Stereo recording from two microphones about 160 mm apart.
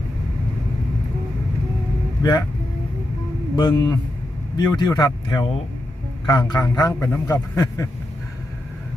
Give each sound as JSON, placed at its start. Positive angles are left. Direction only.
{"t": 3.5, "sound": "a man's voice", "side_deg": 25}